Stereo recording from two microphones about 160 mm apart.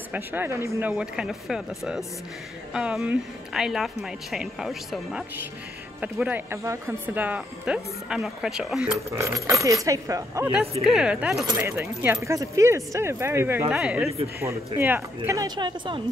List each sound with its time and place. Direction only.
0.1 s speech: 10° right (ahead or behind)
9.1 s speech: 20° right (ahead or behind)
10.8 s speech: 5° right (ahead or behind)
11.3 s speech: 20° right (ahead or behind)